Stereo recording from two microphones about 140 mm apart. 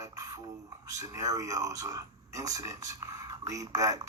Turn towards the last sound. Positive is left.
turn(degrees=-25)  # may be behind; listen again after turning